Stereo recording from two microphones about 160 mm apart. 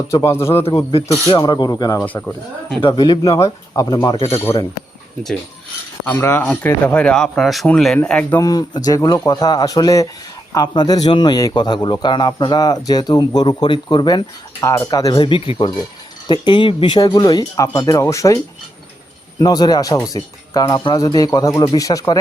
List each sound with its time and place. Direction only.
0.1 s speech: 20° left (ahead or behind)
0.6 s a man's voice: 35° left (ahead or behind)
2.0 s speech: 5° left (ahead or behind)
2.8 s a man's voice: 30° left (ahead or behind)
4.5 s a man's voice: 35° left (ahead or behind)
6.1 s speech: 15° left (ahead or behind)
8.4 s a man's voice: 25° left (ahead or behind)
19.4 s a man's voice: 25° left (ahead or behind)